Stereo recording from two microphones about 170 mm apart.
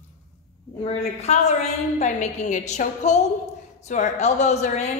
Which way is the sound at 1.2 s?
40° left (ahead or behind).